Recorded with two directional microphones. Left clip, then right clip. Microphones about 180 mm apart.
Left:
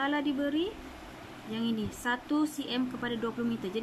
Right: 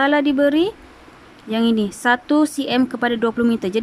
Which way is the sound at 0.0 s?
55° right (ahead or behind).